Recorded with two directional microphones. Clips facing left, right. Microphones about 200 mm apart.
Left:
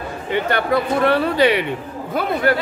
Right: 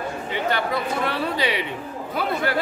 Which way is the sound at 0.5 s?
60° left (ahead or behind).